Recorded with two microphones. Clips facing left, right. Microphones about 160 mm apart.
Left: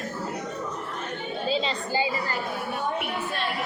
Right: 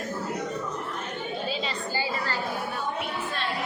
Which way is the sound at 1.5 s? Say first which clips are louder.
Left 4 dB; 25° left (ahead or behind).